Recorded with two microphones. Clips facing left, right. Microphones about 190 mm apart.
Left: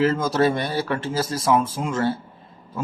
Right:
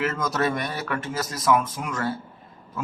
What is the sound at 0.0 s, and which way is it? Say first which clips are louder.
A man's voice: left 6 dB; 30° left (ahead or behind).